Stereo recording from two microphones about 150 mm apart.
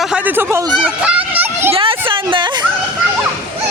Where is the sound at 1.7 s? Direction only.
35° right (ahead or behind).